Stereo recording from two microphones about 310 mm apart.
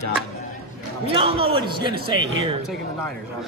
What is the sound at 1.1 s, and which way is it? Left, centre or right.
Speech, centre.